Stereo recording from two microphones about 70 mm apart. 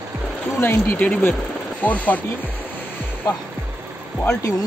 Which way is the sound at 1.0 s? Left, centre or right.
Left.